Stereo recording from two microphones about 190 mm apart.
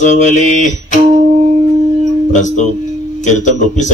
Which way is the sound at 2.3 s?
40° left (ahead or behind).